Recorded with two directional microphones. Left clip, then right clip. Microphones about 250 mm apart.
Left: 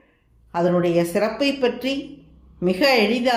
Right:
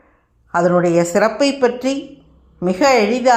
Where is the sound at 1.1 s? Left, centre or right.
Right.